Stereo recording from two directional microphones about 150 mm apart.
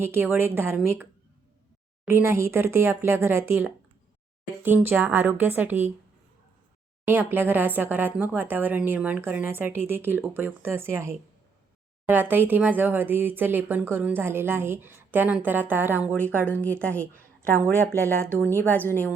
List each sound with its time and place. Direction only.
0.0 s speech: 15° right (ahead or behind)
2.0 s speech: 15° right (ahead or behind)
7.1 s speech: 15° right (ahead or behind)
18.4 s a woman's voice: 10° left (ahead or behind)